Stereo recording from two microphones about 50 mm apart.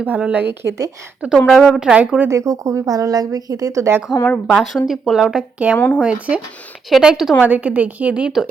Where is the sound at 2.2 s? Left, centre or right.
Right.